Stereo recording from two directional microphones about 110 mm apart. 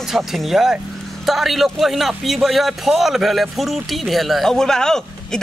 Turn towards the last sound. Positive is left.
turn(degrees=5)  # may be behind; listen again after turning